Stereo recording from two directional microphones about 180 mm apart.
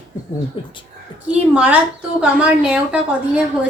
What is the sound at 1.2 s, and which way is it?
A woman's voice, 5° right (ahead or behind).